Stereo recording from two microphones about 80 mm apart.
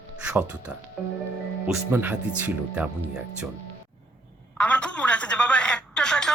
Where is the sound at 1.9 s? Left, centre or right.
Right.